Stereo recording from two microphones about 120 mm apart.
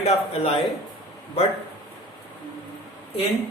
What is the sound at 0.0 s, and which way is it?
Speech, 60° left (ahead or behind).